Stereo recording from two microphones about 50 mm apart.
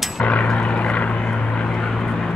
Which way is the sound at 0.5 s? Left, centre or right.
Left.